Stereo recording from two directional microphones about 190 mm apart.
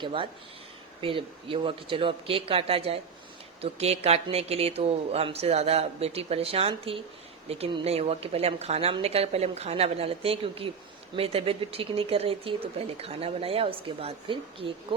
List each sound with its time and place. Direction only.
0.0 s speech: 25° right (ahead or behind)